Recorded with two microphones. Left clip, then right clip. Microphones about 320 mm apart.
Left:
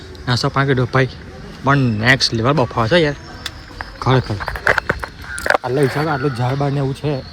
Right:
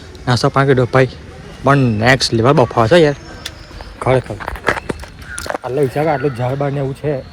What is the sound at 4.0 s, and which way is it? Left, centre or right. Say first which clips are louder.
Speech: right 3 dB; centre.